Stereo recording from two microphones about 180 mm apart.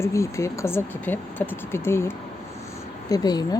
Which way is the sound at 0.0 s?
15° left (ahead or behind).